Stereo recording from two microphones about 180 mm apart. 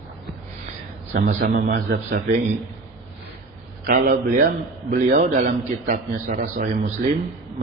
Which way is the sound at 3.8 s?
50° right (ahead or behind).